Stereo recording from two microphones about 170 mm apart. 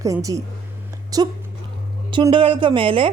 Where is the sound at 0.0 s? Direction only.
20° right (ahead or behind).